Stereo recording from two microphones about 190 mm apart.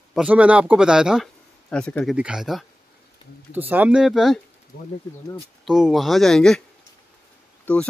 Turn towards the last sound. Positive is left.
turn(degrees=5)  # may be behind; listen again after turning